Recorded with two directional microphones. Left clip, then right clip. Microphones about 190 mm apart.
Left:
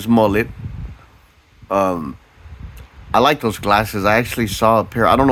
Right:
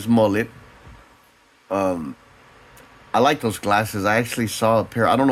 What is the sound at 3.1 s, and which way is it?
Speech, 30° left (ahead or behind).